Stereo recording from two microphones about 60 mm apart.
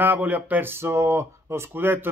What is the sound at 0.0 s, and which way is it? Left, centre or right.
Speech, right.